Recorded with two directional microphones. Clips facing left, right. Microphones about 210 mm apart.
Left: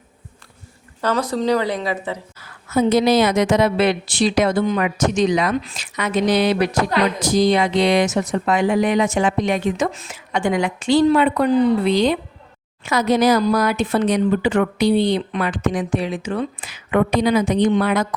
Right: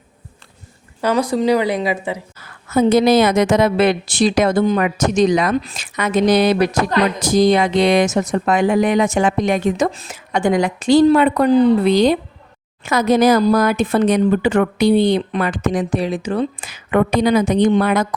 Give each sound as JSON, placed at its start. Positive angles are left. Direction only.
{"t": 1.0, "sound": "speech", "side_deg": -10}
{"t": 2.7, "sound": "speech", "side_deg": -50}